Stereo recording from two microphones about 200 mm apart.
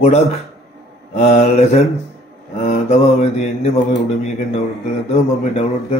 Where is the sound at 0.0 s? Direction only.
35° left (ahead or behind).